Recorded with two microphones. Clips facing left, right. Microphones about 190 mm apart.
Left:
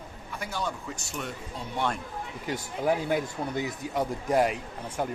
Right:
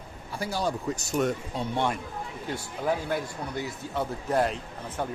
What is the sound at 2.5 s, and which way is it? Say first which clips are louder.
Speech: left 2 dB; 15° left (ahead or behind).